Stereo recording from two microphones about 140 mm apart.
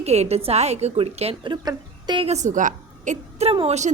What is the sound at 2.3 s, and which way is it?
A woman's voice, 60° right (ahead or behind).